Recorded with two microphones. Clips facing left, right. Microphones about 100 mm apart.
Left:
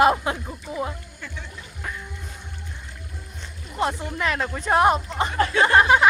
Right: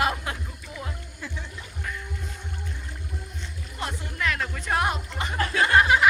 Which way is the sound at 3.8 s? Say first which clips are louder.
Left 6 dB; 25° left (ahead or behind).